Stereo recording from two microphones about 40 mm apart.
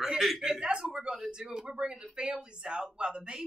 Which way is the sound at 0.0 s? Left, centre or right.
Centre.